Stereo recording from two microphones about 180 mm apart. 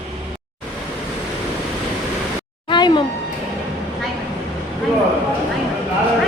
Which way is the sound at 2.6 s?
25° left (ahead or behind).